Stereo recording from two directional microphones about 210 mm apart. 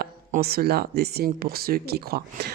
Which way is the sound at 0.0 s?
45° right (ahead or behind).